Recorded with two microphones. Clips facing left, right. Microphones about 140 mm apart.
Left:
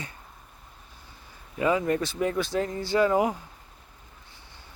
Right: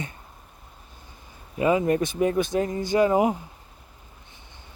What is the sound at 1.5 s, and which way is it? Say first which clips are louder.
Speech: right 3 dB; 20° right (ahead or behind).